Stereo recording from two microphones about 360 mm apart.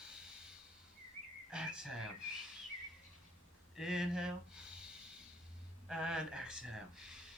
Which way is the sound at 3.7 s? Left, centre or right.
Centre.